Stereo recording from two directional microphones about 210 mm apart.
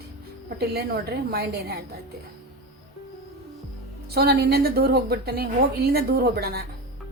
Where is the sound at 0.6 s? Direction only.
50° right (ahead or behind).